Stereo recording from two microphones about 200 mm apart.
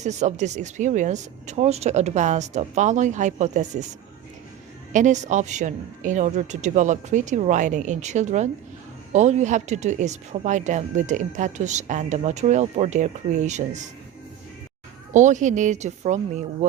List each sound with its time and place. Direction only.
0.0 s speech: 35° right (ahead or behind)
4.9 s speech: 40° right (ahead or behind)
15.1 s speech: 40° right (ahead or behind)